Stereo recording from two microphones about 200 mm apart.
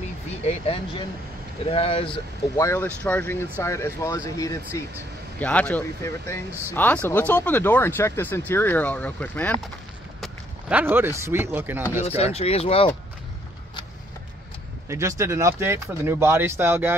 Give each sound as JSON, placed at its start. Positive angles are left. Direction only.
{"t": 0.4, "sound": "speech", "side_deg": 30}
{"t": 10.2, "sound": "speech", "side_deg": -5}
{"t": 12.2, "sound": "speech", "side_deg": 30}
{"t": 14.9, "sound": "speech", "side_deg": -15}